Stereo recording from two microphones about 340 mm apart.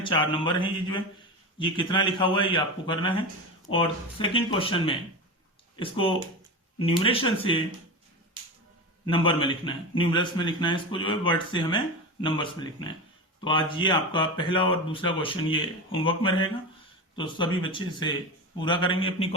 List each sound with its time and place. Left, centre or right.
0.0 s speech: centre
9.0 s speech: centre